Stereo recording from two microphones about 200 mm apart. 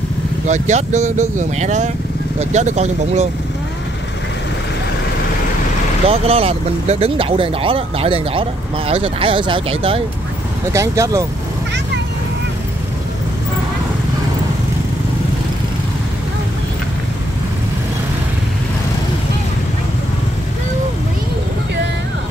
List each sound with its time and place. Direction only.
0.5 s speech: 35° right (ahead or behind)
6.0 s speech: 30° right (ahead or behind)
10.7 s speech: 15° right (ahead or behind)